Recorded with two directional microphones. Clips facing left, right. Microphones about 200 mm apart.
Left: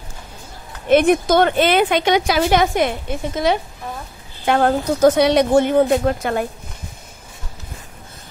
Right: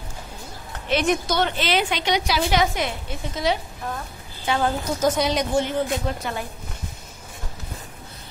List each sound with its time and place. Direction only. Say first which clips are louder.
0.8 s a woman's voice: left 8 dB; 55° left (ahead or behind)